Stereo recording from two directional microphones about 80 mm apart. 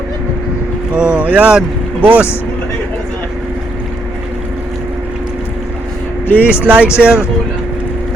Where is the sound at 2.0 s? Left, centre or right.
Centre.